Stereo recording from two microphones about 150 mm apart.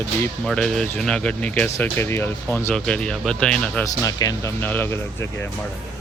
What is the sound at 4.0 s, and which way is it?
Speech, 25° left (ahead or behind).